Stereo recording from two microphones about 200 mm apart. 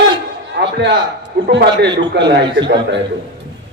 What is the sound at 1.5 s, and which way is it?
A man's voice, 60° right (ahead or behind).